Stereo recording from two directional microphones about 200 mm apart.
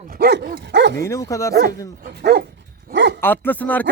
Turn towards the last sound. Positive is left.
turn(degrees=10)  # may be behind; listen again after turning